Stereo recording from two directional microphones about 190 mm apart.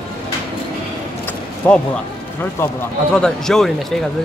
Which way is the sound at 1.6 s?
10° left (ahead or behind).